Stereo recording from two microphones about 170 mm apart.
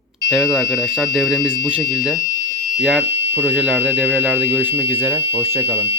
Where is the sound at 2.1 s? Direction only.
20° left (ahead or behind).